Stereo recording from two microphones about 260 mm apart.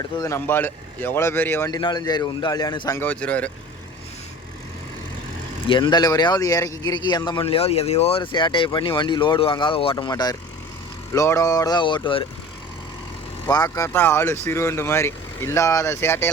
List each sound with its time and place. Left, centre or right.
0.2 s speech: centre
5.6 s speech: centre
13.5 s speech: centre